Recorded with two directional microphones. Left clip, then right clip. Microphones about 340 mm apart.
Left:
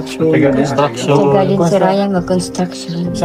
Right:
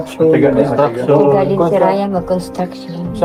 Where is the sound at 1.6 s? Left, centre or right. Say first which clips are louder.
Even; left.